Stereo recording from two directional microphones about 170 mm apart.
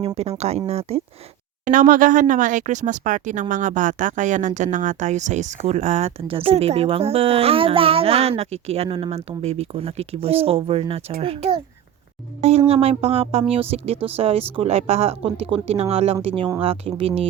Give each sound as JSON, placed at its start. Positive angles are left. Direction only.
{"t": 0.2, "sound": "speech", "side_deg": -40}
{"t": 1.6, "sound": "speech", "side_deg": -50}